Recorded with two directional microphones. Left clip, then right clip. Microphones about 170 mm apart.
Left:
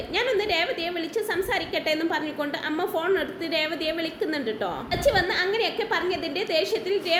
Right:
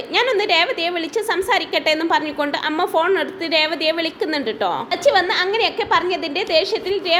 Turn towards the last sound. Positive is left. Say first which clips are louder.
# right 5 dB
turn(degrees=-20)  # may be behind; listen again after turning